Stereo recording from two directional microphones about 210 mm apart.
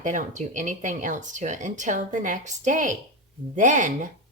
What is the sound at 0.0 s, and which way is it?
Speech, 35° right (ahead or behind).